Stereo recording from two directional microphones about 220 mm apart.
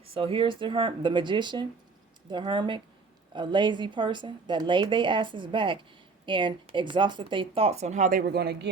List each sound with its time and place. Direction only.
0.0 s a woman's voice: 25° right (ahead or behind); by 8.7 s 45° right (ahead or behind)